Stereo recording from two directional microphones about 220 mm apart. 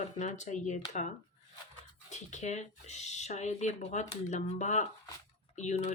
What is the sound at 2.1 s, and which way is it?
Speech, 30° left (ahead or behind).